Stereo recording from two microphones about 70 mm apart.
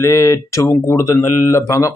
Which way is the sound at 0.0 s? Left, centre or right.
Left.